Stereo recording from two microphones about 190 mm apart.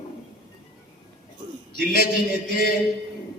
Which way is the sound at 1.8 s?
50° left (ahead or behind).